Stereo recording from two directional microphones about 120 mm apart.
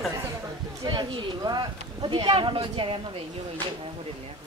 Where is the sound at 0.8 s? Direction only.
40° right (ahead or behind).